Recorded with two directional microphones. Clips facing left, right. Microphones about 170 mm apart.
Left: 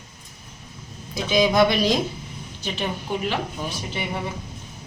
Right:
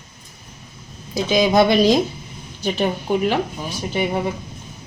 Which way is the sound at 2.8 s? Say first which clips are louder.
Right 7 dB; 50° right (ahead or behind).